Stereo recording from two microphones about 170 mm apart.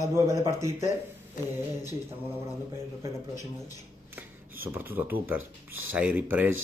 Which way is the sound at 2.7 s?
15° right (ahead or behind).